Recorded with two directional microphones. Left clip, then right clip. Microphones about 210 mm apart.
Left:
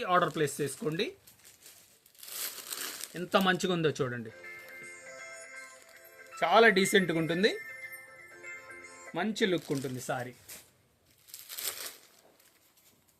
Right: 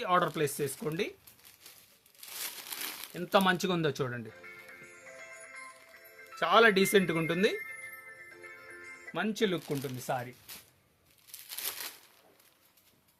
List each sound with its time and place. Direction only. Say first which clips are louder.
0.0 s speech: left 1 dB; 25° right (ahead or behind)
3.2 s speech: right 1 dB; 35° right (ahead or behind)
6.3 s speech: left 1 dB; 35° right (ahead or behind)
9.1 s speech: left 1 dB; 40° right (ahead or behind)